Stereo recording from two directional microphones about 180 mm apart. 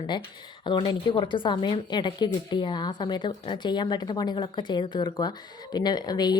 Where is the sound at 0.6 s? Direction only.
25° left (ahead or behind).